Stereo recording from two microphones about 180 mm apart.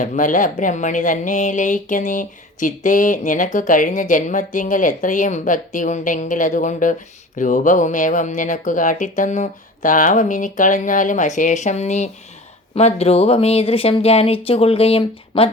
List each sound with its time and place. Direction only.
0.0 s speech: 45° left (ahead or behind)